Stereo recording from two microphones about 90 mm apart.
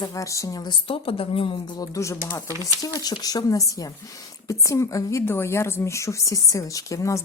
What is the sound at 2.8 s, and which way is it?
Speech, 45° left (ahead or behind).